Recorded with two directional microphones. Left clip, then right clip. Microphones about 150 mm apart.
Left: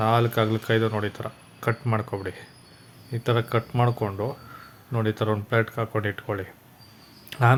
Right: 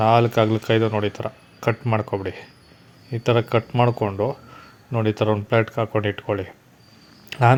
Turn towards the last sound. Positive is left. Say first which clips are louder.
# right 4 dB
turn(degrees=-20)  # may be behind; listen again after turning